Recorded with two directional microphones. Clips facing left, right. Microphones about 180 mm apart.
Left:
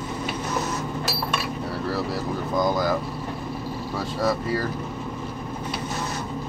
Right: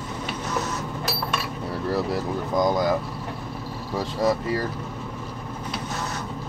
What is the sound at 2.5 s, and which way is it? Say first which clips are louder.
Speech: right 2 dB; 20° right (ahead or behind).